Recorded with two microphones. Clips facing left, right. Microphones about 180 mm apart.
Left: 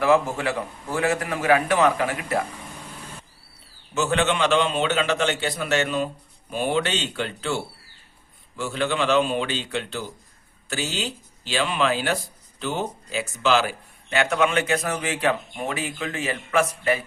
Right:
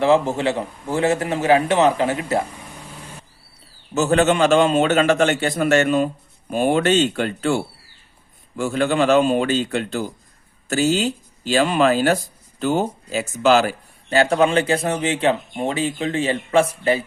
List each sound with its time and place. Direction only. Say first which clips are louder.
0.0 s a man's voice: right 3 dB; 25° right (ahead or behind)
3.9 s a man's voice: right 6 dB; 40° right (ahead or behind)